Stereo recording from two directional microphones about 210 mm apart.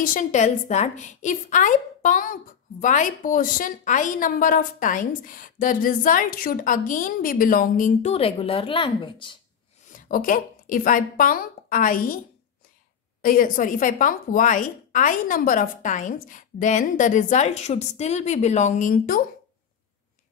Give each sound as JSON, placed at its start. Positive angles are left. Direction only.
{"t": 0.0, "sound": "a woman's voice", "side_deg": 40}
{"t": 9.9, "sound": "a woman's voice", "side_deg": 40}
{"t": 13.2, "sound": "a woman's voice", "side_deg": 40}